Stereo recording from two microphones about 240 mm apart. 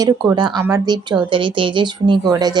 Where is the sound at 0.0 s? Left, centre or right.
Centre.